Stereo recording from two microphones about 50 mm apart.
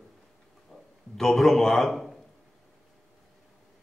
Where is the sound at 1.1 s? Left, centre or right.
Centre.